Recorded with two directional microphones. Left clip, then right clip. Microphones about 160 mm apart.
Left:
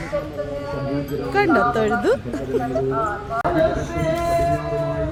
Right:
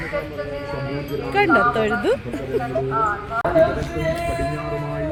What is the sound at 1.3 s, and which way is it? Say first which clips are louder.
Speech: right 1 dB; 5° left (ahead or behind).